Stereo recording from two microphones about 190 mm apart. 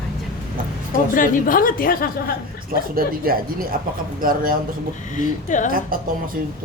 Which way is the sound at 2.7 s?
50° right (ahead or behind).